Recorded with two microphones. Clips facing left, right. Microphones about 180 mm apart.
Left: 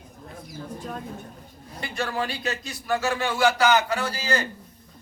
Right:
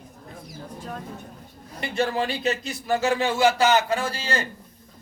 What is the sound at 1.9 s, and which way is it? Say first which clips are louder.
Speech: right 4 dB; 25° right (ahead or behind).